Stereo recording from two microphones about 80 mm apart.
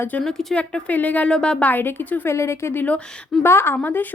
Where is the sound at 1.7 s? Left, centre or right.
Left.